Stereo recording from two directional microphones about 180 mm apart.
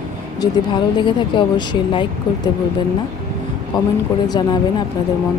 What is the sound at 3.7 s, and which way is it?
Speech, 25° left (ahead or behind).